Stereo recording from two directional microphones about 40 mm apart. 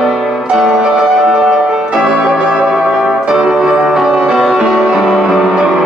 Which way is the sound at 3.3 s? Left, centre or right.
Centre.